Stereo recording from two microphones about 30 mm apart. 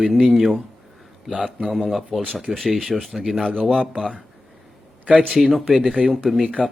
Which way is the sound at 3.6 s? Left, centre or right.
Centre.